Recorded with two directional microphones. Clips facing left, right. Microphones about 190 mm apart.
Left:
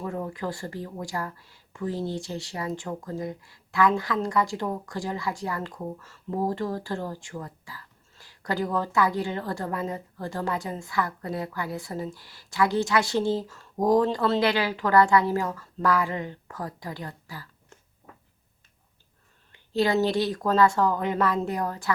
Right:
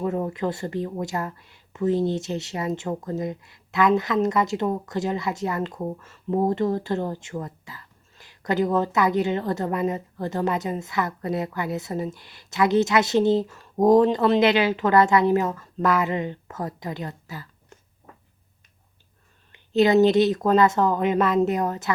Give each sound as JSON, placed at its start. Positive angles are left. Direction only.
{"t": 0.0, "sound": "speech", "side_deg": -25}
{"t": 19.5, "sound": "speech", "side_deg": -20}